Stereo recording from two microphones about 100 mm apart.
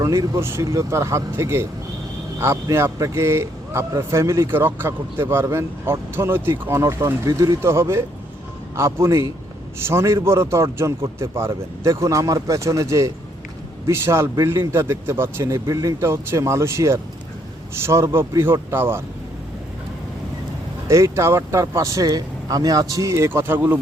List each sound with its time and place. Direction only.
0.0 s speech: 30° right (ahead or behind)
20.8 s speech: 30° right (ahead or behind)